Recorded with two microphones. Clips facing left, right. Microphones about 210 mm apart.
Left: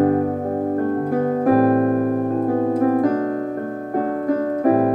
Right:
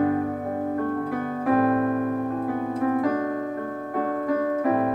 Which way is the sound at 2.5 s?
40° left (ahead or behind).